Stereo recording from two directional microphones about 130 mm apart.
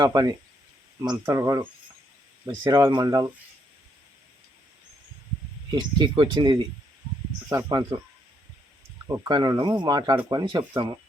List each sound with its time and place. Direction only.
0.0 s speech: 30° right (ahead or behind)
5.7 s speech: 35° right (ahead or behind)
9.0 s speech: 25° right (ahead or behind)